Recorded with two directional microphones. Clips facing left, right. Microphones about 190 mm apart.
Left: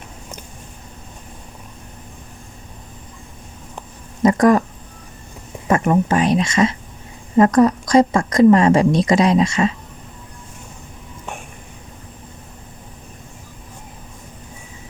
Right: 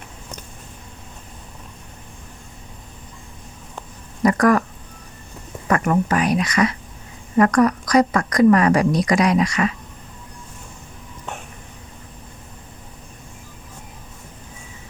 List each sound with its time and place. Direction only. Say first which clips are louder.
4.2 s speech: left 3 dB; 25° left (ahead or behind)
5.6 s a woman's voice: left 3 dB; 25° left (ahead or behind)